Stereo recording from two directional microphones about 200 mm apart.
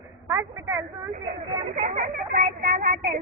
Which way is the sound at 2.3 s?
45° right (ahead or behind).